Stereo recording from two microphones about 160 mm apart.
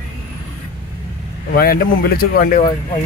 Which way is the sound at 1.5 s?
70° left (ahead or behind).